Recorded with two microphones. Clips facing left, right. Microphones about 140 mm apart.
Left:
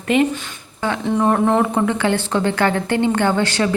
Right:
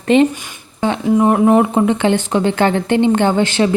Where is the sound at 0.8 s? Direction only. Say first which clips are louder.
Right 4 dB; 15° right (ahead or behind).